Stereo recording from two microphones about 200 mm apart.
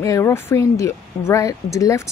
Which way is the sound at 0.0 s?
15° left (ahead or behind).